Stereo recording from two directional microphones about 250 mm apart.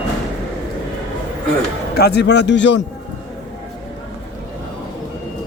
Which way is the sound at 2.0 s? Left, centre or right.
Left.